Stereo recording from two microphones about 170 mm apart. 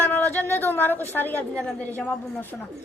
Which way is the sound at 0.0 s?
10° left (ahead or behind).